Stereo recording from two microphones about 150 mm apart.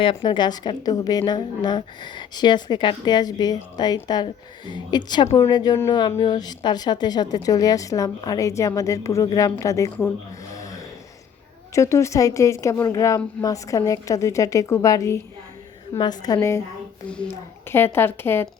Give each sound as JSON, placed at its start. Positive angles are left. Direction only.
{"t": 0.0, "sound": "a woman's voice", "side_deg": 35}
{"t": 10.5, "sound": "snoring", "side_deg": 20}
{"t": 11.7, "sound": "a woman's voice", "side_deg": 20}
{"t": 17.7, "sound": "a woman's voice", "side_deg": 15}